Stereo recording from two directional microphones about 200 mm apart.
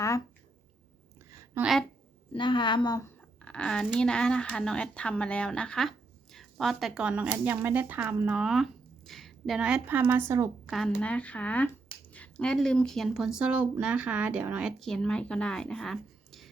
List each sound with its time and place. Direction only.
1.6 s speech: 10° right (ahead or behind)
2.3 s speech: 25° left (ahead or behind)
3.2 s speech: 5° left (ahead or behind); by 10.5 s 15° right (ahead or behind)
10.7 s speech: centre (ahead or behind)